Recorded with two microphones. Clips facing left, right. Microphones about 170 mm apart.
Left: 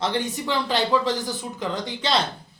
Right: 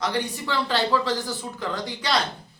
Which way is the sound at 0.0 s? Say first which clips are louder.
Left 1 dB; 25° left (ahead or behind).